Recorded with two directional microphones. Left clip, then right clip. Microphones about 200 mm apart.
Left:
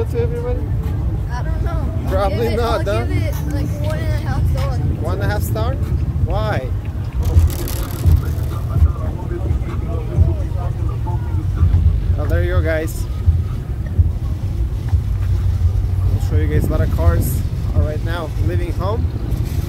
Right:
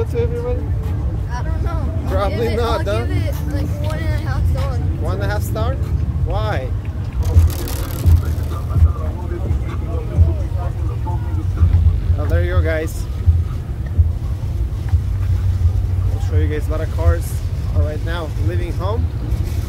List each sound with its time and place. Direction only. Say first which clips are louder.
0.1 s vehicle: right 1 dB; 5° left (ahead or behind)
2.0 s speech: left 1 dB; 10° left (ahead or behind)
3.1 s speech: left 1 dB; 20° right (ahead or behind)
5.0 s speech: even; 5° left (ahead or behind)
7.2 s vehicle: even; 50° right (ahead or behind)
12.2 s vehicle: left 1 dB; 10° left (ahead or behind)
16.3 s speech: left 2 dB; 20° left (ahead or behind)